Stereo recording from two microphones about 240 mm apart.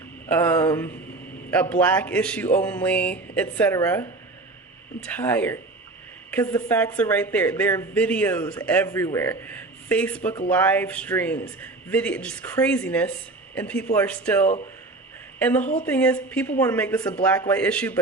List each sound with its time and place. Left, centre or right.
0.3 s speech: centre
15.6 s speech: left
15.9 s speech: centre